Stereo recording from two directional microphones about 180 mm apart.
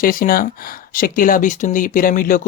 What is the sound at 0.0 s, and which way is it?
Speech, 50° left (ahead or behind).